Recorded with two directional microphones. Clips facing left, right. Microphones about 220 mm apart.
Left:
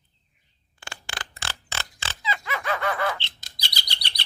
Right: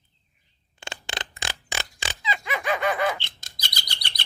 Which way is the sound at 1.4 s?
15° right (ahead or behind).